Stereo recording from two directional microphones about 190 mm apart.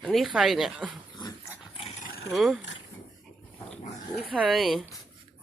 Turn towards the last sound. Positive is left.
turn(degrees=0)  # may be behind; listen again after turning